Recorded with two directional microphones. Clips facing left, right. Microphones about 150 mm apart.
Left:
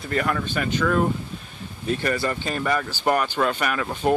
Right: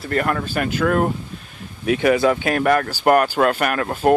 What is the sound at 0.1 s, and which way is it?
Speech, 50° right (ahead or behind).